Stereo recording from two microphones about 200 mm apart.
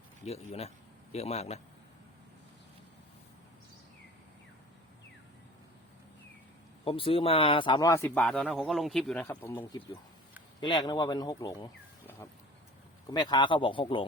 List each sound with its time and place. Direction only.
0.3 s a man's voice: 30° left (ahead or behind)
6.8 s speech: 25° left (ahead or behind)
8.0 s speech: 5° left (ahead or behind)
10.6 s speech: 20° left (ahead or behind)